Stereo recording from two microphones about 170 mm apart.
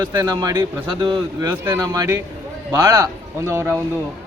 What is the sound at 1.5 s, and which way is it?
A man's voice, 15° right (ahead or behind).